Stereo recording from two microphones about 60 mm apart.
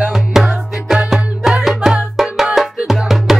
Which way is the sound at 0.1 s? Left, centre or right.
Centre.